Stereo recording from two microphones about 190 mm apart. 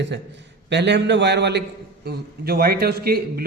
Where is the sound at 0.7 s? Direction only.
65° right (ahead or behind).